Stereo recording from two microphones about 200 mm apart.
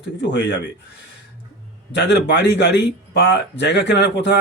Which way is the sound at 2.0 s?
60° left (ahead or behind).